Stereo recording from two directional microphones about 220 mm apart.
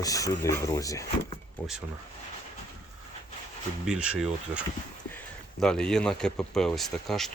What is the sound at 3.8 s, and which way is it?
Speech, 5° right (ahead or behind).